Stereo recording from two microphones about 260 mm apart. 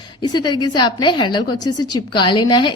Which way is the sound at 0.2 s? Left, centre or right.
Centre.